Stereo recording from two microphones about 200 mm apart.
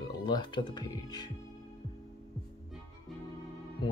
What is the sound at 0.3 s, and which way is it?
Speech, 20° left (ahead or behind).